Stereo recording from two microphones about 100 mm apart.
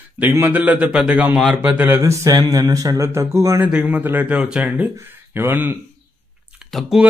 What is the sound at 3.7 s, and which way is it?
A man's voice, 10° right (ahead or behind).